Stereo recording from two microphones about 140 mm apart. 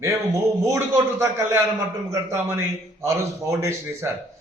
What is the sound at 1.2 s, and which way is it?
A man's voice, 15° right (ahead or behind).